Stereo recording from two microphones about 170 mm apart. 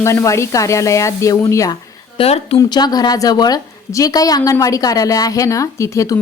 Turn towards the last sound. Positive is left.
turn(degrees=20)  # may be behind; listen again after turning